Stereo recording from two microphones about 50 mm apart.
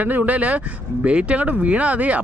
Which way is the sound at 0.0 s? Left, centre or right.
Right.